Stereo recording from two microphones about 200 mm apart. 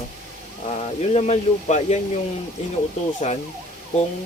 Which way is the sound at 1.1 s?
35° left (ahead or behind).